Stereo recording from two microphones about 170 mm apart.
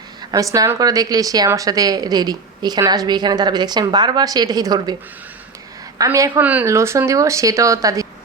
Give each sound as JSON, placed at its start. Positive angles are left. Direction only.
{"t": 0.5, "sound": "a woman's voice", "side_deg": -20}
{"t": 6.0, "sound": "speech", "side_deg": -20}